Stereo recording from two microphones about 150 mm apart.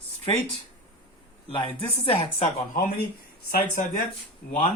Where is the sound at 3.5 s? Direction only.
75° left (ahead or behind).